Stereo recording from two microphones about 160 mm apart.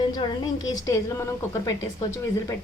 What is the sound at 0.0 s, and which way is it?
A woman's voice, 25° left (ahead or behind).